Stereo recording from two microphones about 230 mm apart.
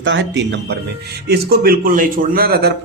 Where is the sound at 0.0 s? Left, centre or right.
Right.